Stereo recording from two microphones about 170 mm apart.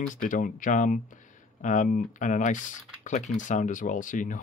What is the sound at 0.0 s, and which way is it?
Speech, 45° left (ahead or behind).